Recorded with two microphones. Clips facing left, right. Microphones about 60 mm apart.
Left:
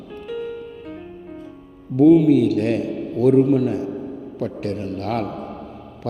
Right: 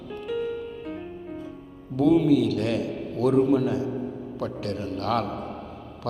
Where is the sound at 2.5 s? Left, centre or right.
Left.